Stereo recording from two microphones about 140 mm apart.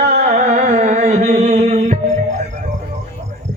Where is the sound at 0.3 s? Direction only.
55° right (ahead or behind).